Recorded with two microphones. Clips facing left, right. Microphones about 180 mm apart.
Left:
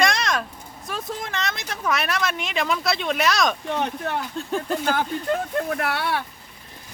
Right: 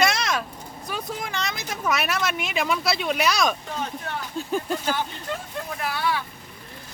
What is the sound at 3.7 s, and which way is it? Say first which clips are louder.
Speech: left 5 dB; 65° left (ahead or behind).